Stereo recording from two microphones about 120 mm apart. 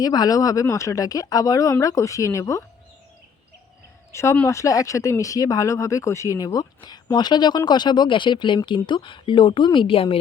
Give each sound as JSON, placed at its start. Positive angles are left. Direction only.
{"t": 0.0, "sound": "speech", "side_deg": 35}
{"t": 4.1, "sound": "speech", "side_deg": 25}